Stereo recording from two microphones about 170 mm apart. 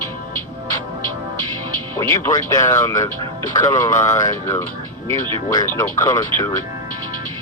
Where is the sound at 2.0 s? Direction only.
15° left (ahead or behind).